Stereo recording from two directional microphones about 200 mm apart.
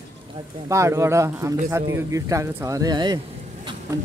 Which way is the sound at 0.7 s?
15° right (ahead or behind).